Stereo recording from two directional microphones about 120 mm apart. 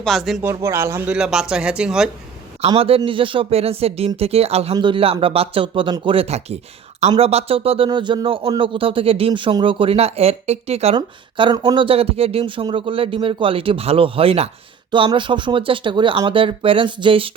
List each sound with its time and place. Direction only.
0.0 s speech: centre (ahead or behind)
0.4 s a man's voice: 20° right (ahead or behind)
1.1 s speech: 5° right (ahead or behind)
2.6 s speech: 50° right (ahead or behind)
4.8 s speech: 45° right (ahead or behind)
7.9 s speech: 40° right (ahead or behind); by 10.9 s 60° right (ahead or behind)
10.9 s speech: 40° right (ahead or behind)
14.8 s speech: 45° right (ahead or behind)